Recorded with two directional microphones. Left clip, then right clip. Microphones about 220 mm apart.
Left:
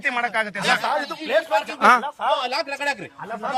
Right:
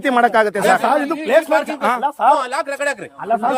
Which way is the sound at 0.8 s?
50° right (ahead or behind).